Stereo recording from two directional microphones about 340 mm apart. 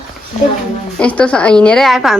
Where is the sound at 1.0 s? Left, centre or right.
Centre.